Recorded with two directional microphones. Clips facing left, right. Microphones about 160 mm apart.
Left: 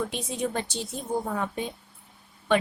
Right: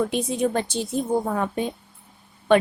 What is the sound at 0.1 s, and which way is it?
Speech, 55° right (ahead or behind).